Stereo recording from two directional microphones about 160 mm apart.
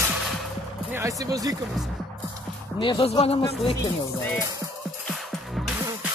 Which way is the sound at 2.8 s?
35° left (ahead or behind).